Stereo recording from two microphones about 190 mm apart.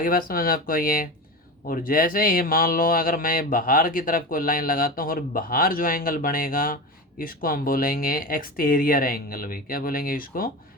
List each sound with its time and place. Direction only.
0.0 s speech: 50° left (ahead or behind)